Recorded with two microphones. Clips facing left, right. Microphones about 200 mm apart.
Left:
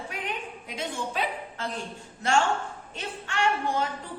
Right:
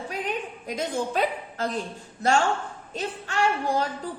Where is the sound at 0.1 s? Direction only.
40° right (ahead or behind).